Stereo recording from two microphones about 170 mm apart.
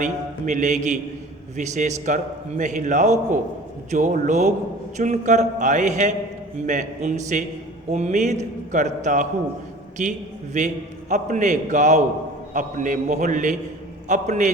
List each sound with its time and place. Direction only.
0.0 s a man's voice: 45° right (ahead or behind)